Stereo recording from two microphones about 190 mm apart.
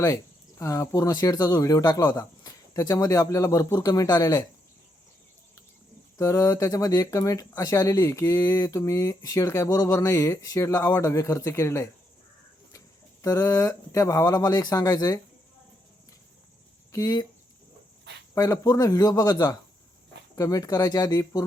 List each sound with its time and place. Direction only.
0.6 s speech: 15° left (ahead or behind)
6.1 s speech: 15° left (ahead or behind)
13.2 s speech: 15° left (ahead or behind)
16.9 s speech: 15° left (ahead or behind)
18.3 s speech: 15° left (ahead or behind)